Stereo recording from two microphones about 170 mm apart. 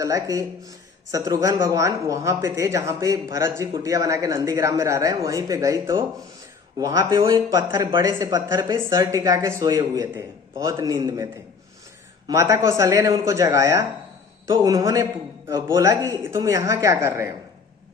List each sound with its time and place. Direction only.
0.0 s speech: 20° right (ahead or behind)
12.3 s speech: 15° right (ahead or behind)